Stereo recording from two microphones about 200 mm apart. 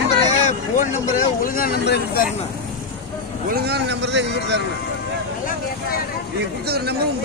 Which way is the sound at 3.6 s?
55° right (ahead or behind).